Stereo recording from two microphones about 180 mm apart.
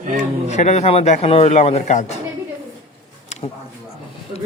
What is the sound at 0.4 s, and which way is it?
A man's voice, 40° left (ahead or behind).